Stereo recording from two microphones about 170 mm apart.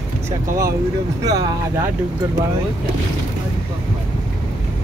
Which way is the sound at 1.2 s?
20° right (ahead or behind).